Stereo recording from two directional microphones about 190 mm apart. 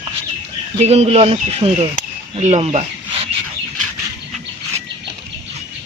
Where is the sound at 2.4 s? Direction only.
35° right (ahead or behind).